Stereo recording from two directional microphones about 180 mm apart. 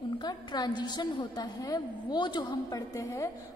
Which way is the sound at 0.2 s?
25° left (ahead or behind).